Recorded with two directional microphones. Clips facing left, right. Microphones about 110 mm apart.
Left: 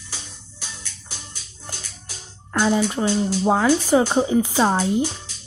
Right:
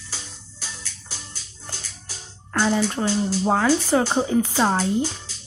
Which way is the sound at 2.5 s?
15° left (ahead or behind).